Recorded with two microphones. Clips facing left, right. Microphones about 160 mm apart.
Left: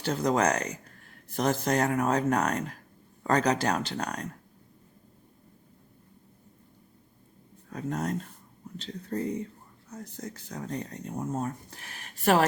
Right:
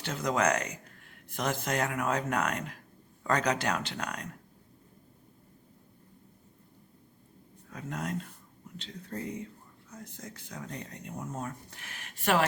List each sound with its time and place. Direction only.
0.0 s speech: 35° left (ahead or behind)
7.7 s speech: 35° left (ahead or behind)